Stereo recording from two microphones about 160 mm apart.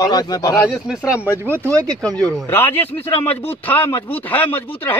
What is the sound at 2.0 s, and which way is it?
Speech, 25° right (ahead or behind).